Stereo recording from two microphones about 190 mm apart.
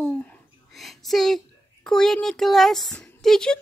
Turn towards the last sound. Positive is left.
turn(degrees=5)  # may be behind; listen again after turning